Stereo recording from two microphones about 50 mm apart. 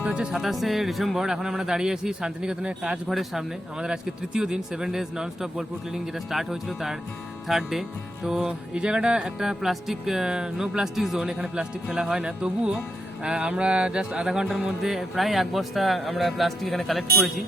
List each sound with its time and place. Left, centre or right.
0.0 s speech: right
0.5 s speech: centre
3.1 s speech: centre
3.8 s speech: centre
9.4 s speech: centre